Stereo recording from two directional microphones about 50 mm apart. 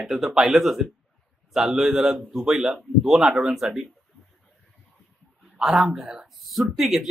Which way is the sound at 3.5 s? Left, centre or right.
Centre.